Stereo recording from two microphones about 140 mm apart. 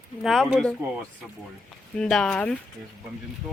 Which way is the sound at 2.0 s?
5° left (ahead or behind).